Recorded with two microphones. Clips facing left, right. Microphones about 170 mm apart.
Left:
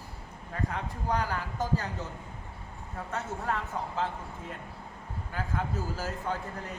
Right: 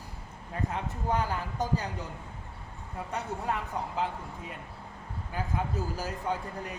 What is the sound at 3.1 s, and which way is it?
A man's voice, 15° right (ahead or behind).